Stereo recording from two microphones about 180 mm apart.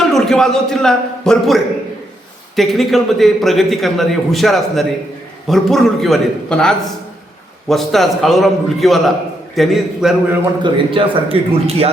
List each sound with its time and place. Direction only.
0.1 s a man's voice: centre (ahead or behind)
10.6 s a man's voice: 30° right (ahead or behind)